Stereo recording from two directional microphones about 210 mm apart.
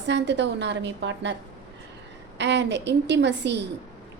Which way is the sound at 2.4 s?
55° right (ahead or behind).